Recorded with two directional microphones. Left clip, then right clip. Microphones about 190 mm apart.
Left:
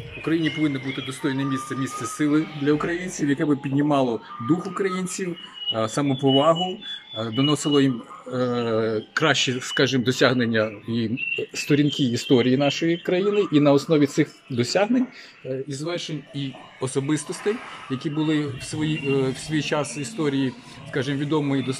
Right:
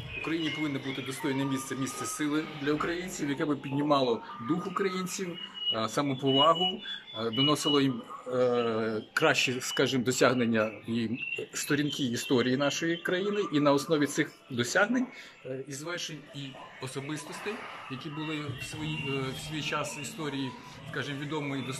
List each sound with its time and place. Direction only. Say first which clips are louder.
0.2 s speech: left 9 dB; centre (ahead or behind); by 21.7 s 25° left (ahead or behind)